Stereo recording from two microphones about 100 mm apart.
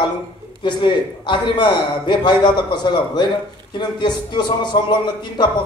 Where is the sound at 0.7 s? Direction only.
50° left (ahead or behind).